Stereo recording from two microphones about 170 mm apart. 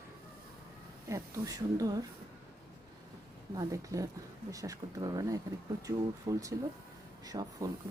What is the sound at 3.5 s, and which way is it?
Speech, 20° right (ahead or behind).